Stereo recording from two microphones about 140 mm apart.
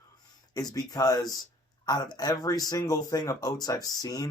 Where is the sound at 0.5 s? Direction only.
25° left (ahead or behind).